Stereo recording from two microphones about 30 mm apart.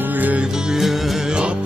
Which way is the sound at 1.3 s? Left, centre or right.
Right.